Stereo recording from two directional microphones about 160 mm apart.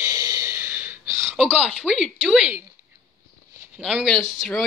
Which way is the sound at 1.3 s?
Centre (ahead or behind).